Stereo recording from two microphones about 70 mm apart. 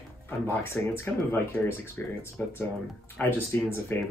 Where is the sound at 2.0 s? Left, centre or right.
Left.